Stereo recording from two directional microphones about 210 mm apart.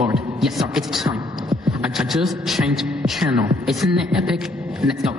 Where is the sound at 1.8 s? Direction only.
Centre (ahead or behind).